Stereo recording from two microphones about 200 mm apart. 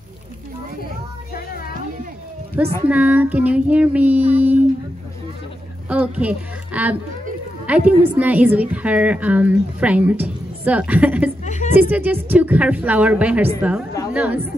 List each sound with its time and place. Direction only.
2.6 s a woman's voice: 5° right (ahead or behind)
5.9 s a woman's voice: 5° right (ahead or behind)
11.4 s music: 35° left (ahead or behind)
11.7 s a woman's voice: 10° right (ahead or behind)